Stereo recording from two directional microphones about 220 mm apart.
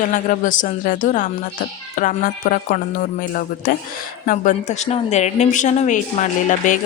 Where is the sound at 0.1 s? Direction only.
35° left (ahead or behind).